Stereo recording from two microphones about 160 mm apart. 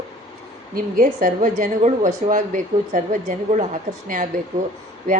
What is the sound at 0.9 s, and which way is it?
A woman's voice, 60° right (ahead or behind).